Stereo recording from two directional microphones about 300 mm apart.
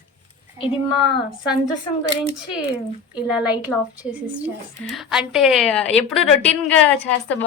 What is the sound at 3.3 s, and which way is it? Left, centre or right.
A woman's voice, centre.